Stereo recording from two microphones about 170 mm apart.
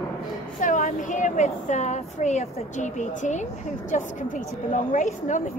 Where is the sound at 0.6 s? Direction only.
50° left (ahead or behind).